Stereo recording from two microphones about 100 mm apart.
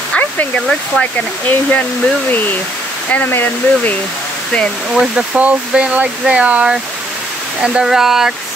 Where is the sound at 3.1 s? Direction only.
20° left (ahead or behind).